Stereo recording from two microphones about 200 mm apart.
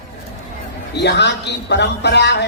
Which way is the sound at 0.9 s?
55° left (ahead or behind).